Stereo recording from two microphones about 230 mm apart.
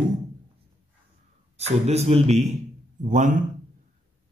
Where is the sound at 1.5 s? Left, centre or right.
Right.